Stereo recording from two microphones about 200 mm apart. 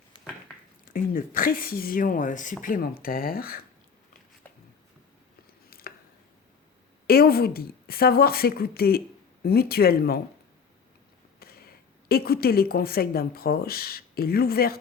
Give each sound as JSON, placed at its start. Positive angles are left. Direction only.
{"t": 0.9, "sound": "speech", "side_deg": 45}
{"t": 5.7, "sound": "a sound", "side_deg": 45}
{"t": 7.1, "sound": "speech", "side_deg": 50}
{"t": 11.3, "sound": "speech", "side_deg": 50}